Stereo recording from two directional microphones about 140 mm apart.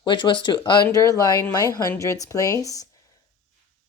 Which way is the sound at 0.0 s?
35° left (ahead or behind).